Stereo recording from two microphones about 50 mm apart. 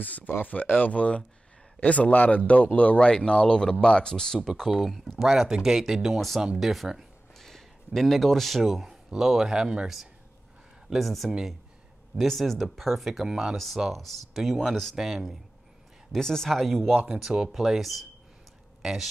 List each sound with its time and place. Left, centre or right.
0.0 s speech: left
0.9 s speech: left; by 7.1 s centre
7.3 s a man's voice: centre
15.0 s speech: centre
16.1 s speech: centre